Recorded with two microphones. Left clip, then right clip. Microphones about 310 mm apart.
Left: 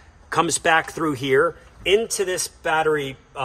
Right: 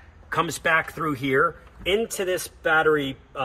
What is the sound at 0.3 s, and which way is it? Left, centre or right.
Speech, left.